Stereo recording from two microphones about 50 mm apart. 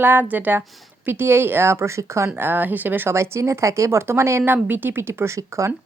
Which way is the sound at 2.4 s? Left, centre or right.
Right.